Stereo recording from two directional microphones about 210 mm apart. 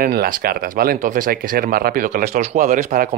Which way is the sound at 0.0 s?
45° right (ahead or behind).